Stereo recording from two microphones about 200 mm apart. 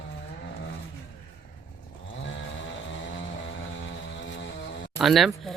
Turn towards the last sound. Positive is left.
turn(degrees=0)  # may be behind; listen again after turning